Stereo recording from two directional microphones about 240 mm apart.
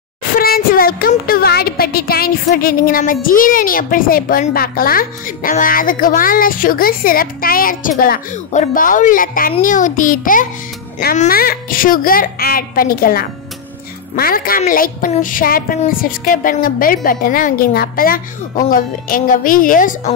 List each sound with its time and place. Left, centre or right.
0.4 s speech: left